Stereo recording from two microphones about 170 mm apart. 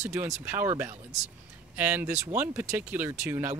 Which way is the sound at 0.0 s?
15° right (ahead or behind).